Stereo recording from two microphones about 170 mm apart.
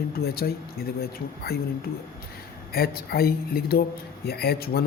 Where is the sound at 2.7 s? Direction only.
65° left (ahead or behind).